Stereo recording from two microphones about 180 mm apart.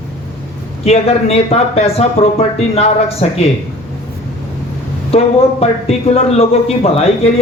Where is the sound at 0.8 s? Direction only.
35° left (ahead or behind).